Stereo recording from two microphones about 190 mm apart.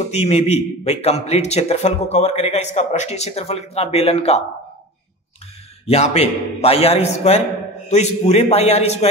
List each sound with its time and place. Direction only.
0.1 s a man's voice: 35° left (ahead or behind)
5.9 s a man's voice: 35° left (ahead or behind)